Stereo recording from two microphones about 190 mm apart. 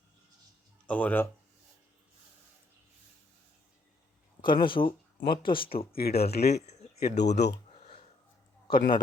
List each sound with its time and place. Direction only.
0.9 s speech: 10° left (ahead or behind)
4.4 s speech: 25° left (ahead or behind)
5.1 s speech: 50° left (ahead or behind)
5.4 s speech: 25° left (ahead or behind)
5.9 s speech: 55° left (ahead or behind)
6.6 s speech: 35° left (ahead or behind)
7.0 s speech: 60° left (ahead or behind)
8.7 s a man's voice: 45° left (ahead or behind)